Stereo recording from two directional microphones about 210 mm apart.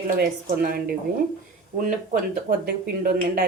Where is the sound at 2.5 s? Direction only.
45° right (ahead or behind).